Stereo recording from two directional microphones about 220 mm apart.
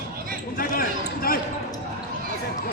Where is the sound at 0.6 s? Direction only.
40° left (ahead or behind).